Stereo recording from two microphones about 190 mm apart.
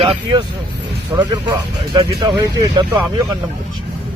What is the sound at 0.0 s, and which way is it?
Speech, 25° right (ahead or behind).